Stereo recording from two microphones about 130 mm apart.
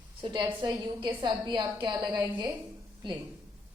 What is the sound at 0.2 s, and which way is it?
A woman's voice, 35° right (ahead or behind).